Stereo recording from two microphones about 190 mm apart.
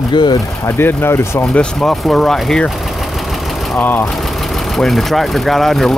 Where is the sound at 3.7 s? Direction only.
10° left (ahead or behind).